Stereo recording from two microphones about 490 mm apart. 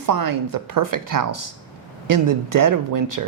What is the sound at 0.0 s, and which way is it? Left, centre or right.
Speech, right.